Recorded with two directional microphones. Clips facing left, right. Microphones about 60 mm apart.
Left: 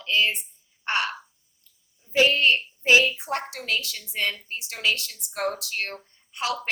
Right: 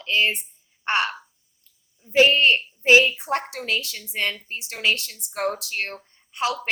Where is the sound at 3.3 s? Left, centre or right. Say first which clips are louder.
Right 3 dB; right.